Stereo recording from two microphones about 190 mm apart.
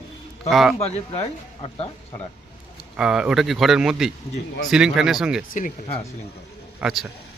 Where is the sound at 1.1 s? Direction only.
30° left (ahead or behind).